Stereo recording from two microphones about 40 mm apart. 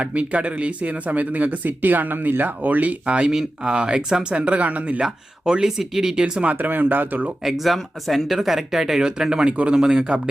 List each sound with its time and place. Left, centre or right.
0.0 s speech: right
3.1 s speech: right
4.4 s speech: right
5.0 s speech: centre
6.6 s speech: right
7.4 s speech: centre
9.5 s speech: right
9.7 s speech: centre